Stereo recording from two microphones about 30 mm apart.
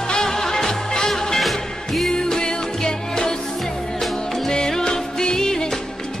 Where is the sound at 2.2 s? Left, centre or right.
Left.